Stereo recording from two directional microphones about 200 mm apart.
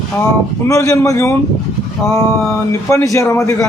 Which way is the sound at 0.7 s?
15° left (ahead or behind).